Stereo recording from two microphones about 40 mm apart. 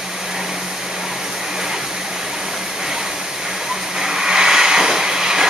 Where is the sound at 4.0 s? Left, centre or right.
Centre.